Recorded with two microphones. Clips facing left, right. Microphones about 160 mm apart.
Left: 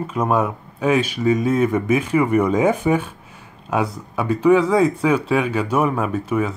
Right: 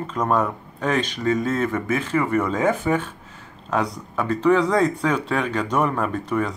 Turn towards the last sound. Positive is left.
turn(degrees=5)  # may be behind; listen again after turning